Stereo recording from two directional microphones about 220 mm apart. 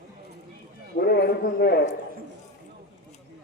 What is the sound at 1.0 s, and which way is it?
Speech, 45° left (ahead or behind).